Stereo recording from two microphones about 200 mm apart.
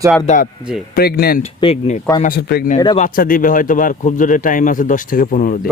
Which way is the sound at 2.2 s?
50° left (ahead or behind).